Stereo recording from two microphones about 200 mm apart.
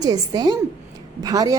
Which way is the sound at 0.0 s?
20° right (ahead or behind).